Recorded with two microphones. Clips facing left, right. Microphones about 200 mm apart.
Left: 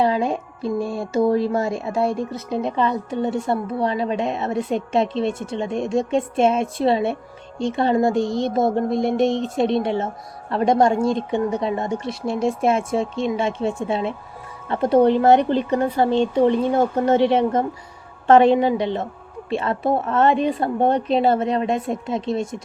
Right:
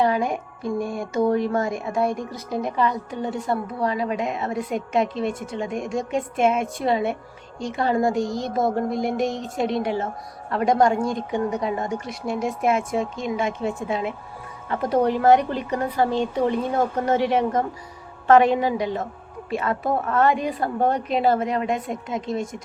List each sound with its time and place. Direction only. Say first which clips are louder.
0.0 s speech: left 2 dB; 25° left (ahead or behind)